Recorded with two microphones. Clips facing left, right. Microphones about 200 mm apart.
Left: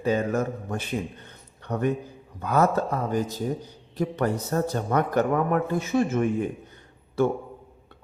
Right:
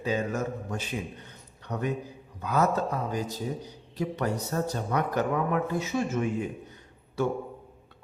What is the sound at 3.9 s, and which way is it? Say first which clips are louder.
A man's voice: left 4 dB; 50° left (ahead or behind).